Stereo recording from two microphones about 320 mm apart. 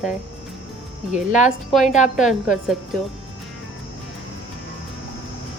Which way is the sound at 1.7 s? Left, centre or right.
Centre.